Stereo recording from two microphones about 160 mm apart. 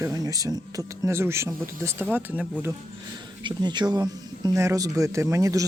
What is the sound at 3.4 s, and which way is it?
Speech, 25° right (ahead or behind).